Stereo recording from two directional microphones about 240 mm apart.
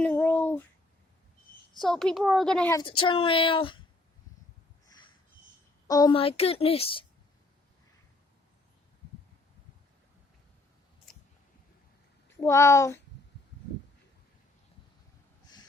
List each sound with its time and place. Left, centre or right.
0.0 s a sound: centre
1.8 s a woman's voice: centre; by 3.8 s left
5.9 s speech: centre
12.4 s speech: centre